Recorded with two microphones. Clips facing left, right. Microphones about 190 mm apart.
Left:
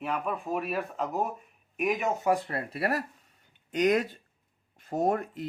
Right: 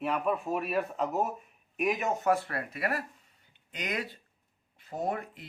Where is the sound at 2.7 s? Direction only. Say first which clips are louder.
Left 4 dB; 40° left (ahead or behind).